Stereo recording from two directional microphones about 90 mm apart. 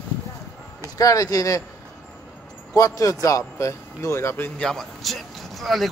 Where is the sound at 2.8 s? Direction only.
40° left (ahead or behind); by 4.6 s 20° left (ahead or behind).